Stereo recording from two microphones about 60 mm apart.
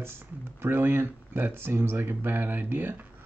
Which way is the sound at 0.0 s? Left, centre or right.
Right.